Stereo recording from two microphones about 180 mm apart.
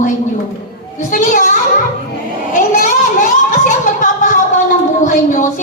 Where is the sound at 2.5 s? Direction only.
50° left (ahead or behind).